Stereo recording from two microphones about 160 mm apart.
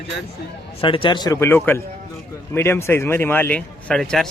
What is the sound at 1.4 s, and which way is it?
Speech, 15° left (ahead or behind).